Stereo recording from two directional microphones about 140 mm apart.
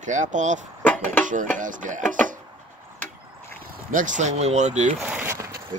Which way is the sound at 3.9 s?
65° right (ahead or behind).